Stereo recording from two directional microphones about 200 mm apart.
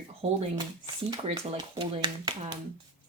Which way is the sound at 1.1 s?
20° right (ahead or behind).